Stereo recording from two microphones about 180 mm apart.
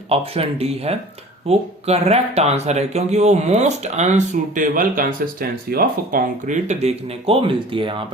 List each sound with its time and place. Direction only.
0.1 s speech: 35° right (ahead or behind)